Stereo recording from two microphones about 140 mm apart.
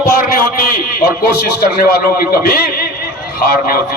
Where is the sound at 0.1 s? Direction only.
90° left.